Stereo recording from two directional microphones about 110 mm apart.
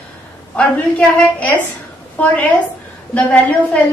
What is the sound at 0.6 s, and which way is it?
A woman's voice, 10° left (ahead or behind).